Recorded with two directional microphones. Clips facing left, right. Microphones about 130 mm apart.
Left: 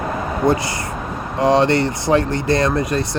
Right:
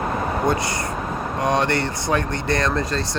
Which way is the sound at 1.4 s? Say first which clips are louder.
Left 7 dB; 25° left (ahead or behind).